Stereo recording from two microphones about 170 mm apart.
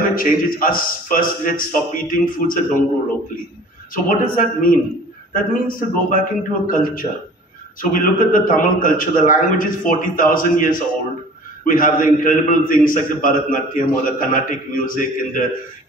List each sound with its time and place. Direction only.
0.1 s a man's voice: 55° left (ahead or behind)
3.9 s a man's voice: 55° left (ahead or behind)